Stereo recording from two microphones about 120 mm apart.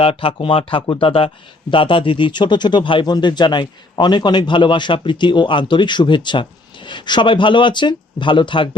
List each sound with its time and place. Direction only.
0.0 s speech: 50° left (ahead or behind)